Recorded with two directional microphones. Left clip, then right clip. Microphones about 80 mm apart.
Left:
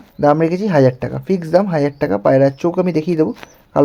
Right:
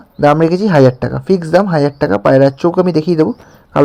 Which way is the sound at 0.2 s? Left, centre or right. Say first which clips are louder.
Right 4 dB; right.